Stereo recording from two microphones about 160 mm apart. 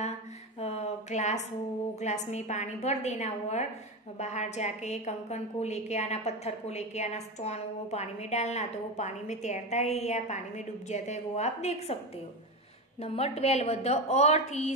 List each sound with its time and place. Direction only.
0.6 s a sound: 45° left (ahead or behind)
2.0 s a woman's voice: 45° left (ahead or behind)
13.0 s a woman's voice: 40° left (ahead or behind)